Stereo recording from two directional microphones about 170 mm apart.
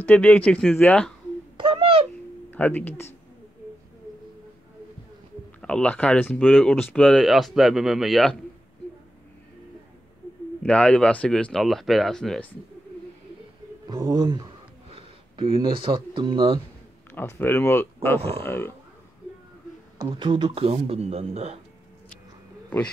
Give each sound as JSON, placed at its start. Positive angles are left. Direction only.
{"t": 0.0, "sound": "speech", "side_deg": 10}
{"t": 1.6, "sound": "a sound", "side_deg": -35}
{"t": 2.5, "sound": "speech", "side_deg": 10}
{"t": 5.6, "sound": "speech", "side_deg": 5}
{"t": 10.6, "sound": "speech", "side_deg": 5}
{"t": 13.8, "sound": "speech", "side_deg": -25}
{"t": 17.1, "sound": "speech", "side_deg": 10}
{"t": 20.0, "sound": "speech", "side_deg": -30}